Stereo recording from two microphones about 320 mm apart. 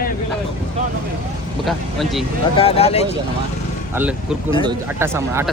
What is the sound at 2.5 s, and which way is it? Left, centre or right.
Speech, centre.